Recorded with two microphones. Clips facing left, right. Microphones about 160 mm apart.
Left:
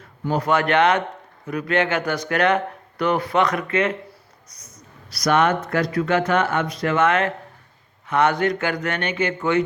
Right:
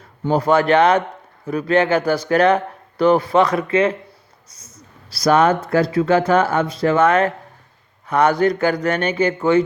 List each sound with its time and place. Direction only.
0.3 s speech: 35° right (ahead or behind)
4.6 s a sound: 30° right (ahead or behind)
5.6 s speech: 30° right (ahead or behind)